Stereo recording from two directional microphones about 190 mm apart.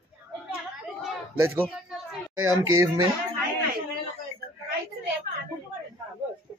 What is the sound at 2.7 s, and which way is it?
Speech, 20° right (ahead or behind).